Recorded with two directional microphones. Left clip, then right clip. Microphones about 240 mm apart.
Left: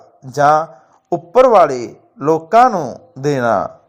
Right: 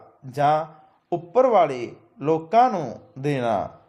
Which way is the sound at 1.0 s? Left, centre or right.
Left.